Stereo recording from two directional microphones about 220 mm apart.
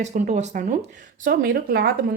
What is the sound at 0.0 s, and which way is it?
Speech, 30° right (ahead or behind).